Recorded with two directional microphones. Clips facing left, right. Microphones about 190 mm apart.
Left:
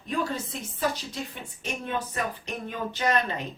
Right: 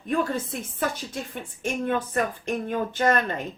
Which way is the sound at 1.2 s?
50° right (ahead or behind).